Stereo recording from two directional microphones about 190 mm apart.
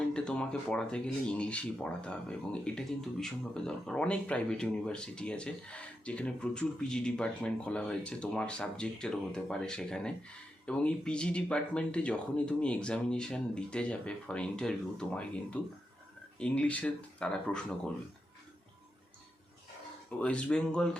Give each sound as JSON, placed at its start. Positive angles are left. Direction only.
{"t": 0.1, "sound": "speech", "side_deg": 5}
{"t": 20.1, "sound": "speech", "side_deg": 5}